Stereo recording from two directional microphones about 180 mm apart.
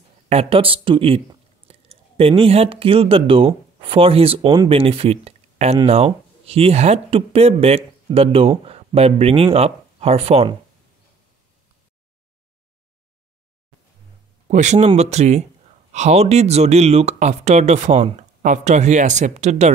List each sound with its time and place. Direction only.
0.3 s speech: 30° right (ahead or behind)
14.5 s speech: 40° right (ahead or behind)